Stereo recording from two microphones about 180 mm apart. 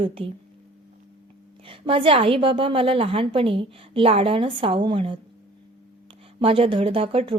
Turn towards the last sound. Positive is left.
turn(degrees=-30)  # may be behind; listen again after turning